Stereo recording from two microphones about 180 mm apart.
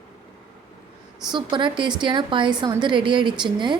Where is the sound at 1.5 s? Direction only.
25° right (ahead or behind).